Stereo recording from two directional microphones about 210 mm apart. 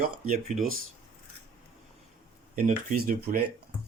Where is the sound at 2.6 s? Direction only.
40° right (ahead or behind).